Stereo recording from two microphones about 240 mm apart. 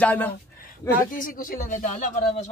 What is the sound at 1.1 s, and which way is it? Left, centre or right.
Speech, left.